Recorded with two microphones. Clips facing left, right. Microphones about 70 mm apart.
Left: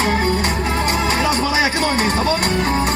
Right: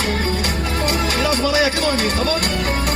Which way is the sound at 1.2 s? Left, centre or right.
Left.